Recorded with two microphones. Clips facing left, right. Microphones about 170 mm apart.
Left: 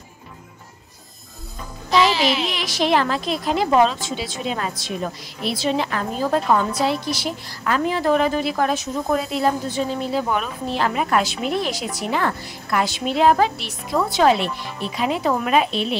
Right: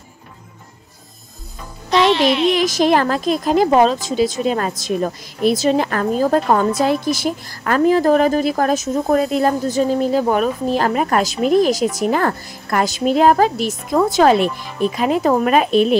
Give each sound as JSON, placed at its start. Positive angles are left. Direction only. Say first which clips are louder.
{"t": 1.9, "sound": "speech", "louder": "right 4 dB", "side_deg": 0}
{"t": 2.5, "sound": "a woman's voice", "louder": "right 5 dB", "side_deg": -45}